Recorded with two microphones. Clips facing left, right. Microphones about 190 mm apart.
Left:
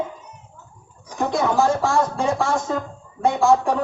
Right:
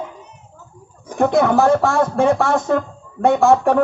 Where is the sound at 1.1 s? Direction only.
60° right (ahead or behind).